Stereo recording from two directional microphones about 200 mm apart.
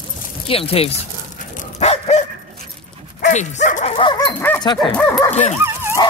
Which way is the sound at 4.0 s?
20° left (ahead or behind).